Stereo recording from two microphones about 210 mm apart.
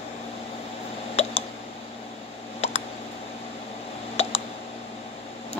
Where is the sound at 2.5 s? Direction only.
30° left (ahead or behind).